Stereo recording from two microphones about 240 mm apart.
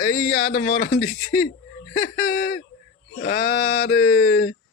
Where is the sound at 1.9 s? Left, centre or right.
Left.